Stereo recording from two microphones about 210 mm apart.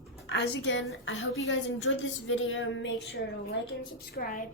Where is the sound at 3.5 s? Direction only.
50° left (ahead or behind).